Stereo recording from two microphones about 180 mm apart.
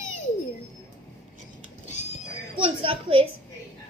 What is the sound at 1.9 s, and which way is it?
Music, 40° left (ahead or behind).